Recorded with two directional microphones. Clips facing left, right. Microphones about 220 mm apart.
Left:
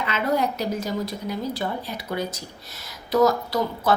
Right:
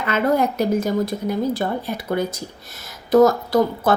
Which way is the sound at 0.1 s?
50° right (ahead or behind).